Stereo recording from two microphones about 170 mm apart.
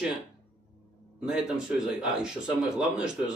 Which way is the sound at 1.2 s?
5° right (ahead or behind).